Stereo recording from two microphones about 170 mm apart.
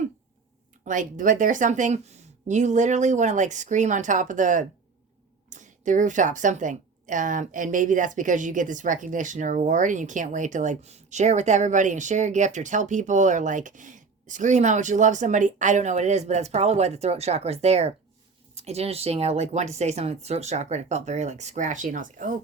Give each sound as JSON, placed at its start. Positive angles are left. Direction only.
{"t": 0.9, "sound": "a woman's voice", "side_deg": -50}